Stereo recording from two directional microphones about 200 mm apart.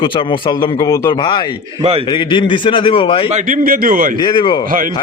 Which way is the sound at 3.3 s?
45° right (ahead or behind).